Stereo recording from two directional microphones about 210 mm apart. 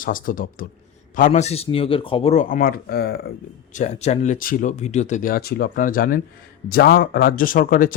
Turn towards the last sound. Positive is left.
turn(degrees=40)  # may be behind; listen again after turning